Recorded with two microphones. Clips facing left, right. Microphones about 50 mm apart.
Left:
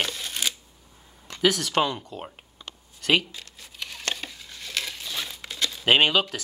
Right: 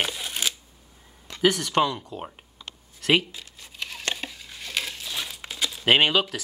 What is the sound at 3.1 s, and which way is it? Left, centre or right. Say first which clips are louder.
Speech: right 1 dB; centre.